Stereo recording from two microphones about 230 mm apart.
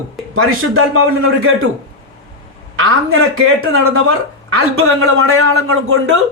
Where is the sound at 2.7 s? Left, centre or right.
Right.